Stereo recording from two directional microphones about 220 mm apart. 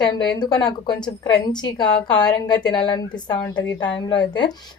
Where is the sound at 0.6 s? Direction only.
20° left (ahead or behind).